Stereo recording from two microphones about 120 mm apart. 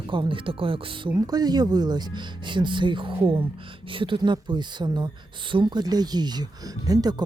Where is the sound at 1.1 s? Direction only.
30° right (ahead or behind).